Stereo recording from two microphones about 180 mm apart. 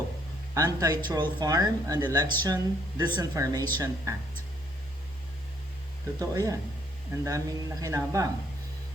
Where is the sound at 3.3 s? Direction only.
20° right (ahead or behind).